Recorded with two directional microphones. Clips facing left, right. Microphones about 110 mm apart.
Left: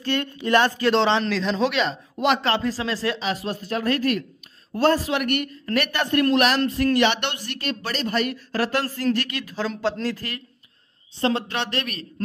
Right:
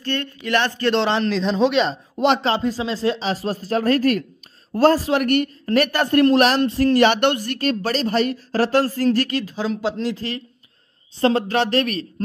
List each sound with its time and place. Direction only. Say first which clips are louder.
0.0 s speech: even; 5° left (ahead or behind)
0.4 s speech: left 3 dB; 20° left (ahead or behind)
0.7 s a man's voice: even; centre (ahead or behind)
1.3 s speech: right 4 dB; 25° right (ahead or behind)
9.7 s speech: right 1 dB; 15° right (ahead or behind)
10.0 s speech: right 3 dB; 25° right (ahead or behind)
11.1 s speech: right 6 dB; 40° right (ahead or behind)